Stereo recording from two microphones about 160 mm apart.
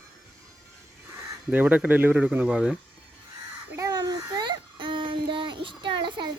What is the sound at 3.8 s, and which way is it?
Child singing, 25° right (ahead or behind).